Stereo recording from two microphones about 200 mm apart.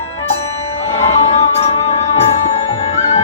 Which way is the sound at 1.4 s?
30° left (ahead or behind).